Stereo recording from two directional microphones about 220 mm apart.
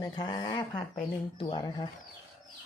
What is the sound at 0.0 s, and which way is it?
Speech, 20° left (ahead or behind).